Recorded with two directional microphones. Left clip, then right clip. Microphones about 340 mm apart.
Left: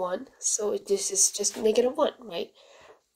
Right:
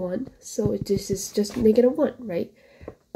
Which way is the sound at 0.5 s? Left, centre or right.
Left.